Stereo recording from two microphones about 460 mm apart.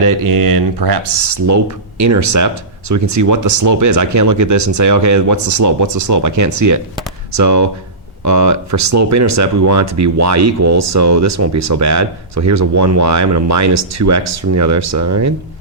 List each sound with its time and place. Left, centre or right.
0.0 s speech: right
1.5 s speech: right